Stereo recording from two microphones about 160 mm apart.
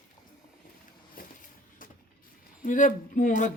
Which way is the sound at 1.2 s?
65° left (ahead or behind).